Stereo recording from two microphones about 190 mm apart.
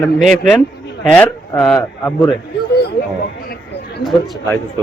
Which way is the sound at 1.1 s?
10° left (ahead or behind).